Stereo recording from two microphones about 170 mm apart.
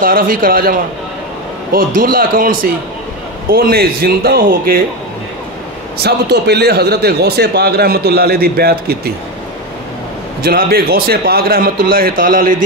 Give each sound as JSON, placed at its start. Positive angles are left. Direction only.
{"t": 0.0, "sound": "a man's voice", "side_deg": -55}
{"t": 6.0, "sound": "a man's voice", "side_deg": -75}
{"t": 10.4, "sound": "a man's voice", "side_deg": -60}